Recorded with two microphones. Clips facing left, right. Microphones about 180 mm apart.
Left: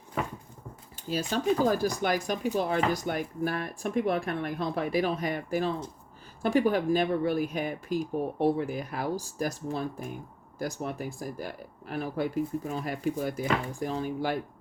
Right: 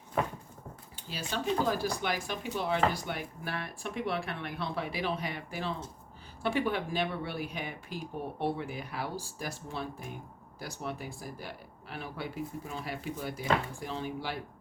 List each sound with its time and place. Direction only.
1.0 s speech: 45° left (ahead or behind)